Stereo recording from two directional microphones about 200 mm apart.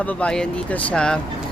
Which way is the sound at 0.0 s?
5° left (ahead or behind).